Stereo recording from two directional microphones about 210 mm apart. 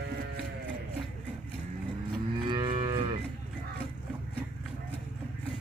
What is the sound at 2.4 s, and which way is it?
Livestock, 20° right (ahead or behind).